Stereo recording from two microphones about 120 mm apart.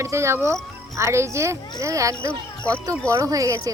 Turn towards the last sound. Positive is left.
turn(degrees=-25)  # may be behind; listen again after turning